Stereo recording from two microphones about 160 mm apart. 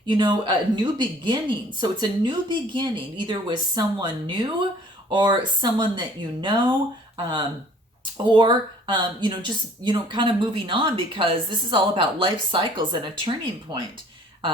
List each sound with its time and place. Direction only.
0.0 s a woman's voice: 30° right (ahead or behind)
8.2 s a woman's voice: 30° right (ahead or behind)